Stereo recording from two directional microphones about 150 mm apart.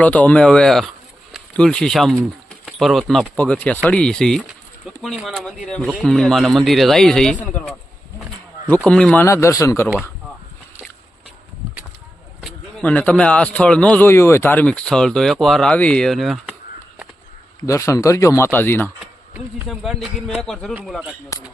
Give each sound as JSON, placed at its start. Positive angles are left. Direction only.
{"t": 0.0, "sound": "speech", "side_deg": 10}
{"t": 8.6, "sound": "speech", "side_deg": 10}
{"t": 9.2, "sound": "speech", "side_deg": 20}
{"t": 12.8, "sound": "speech", "side_deg": 10}
{"t": 17.7, "sound": "speech", "side_deg": 20}
{"t": 19.6, "sound": "speech", "side_deg": 0}